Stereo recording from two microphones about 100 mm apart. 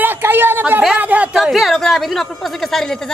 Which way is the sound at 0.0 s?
20° right (ahead or behind).